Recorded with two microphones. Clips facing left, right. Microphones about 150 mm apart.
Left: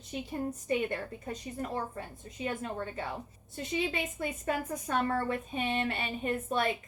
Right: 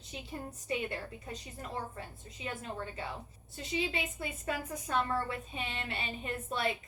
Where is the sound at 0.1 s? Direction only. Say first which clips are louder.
Left 8 dB; 45° left (ahead or behind).